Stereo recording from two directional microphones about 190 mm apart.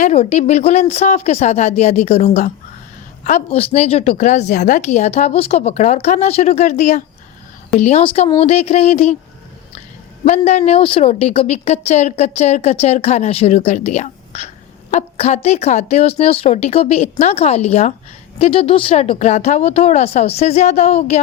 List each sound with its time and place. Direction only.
0.0 s speech: 35° left (ahead or behind)
10.2 s speech: 35° left (ahead or behind)